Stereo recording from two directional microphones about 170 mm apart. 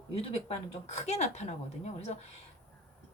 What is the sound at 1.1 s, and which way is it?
A woman's voice, 40° left (ahead or behind).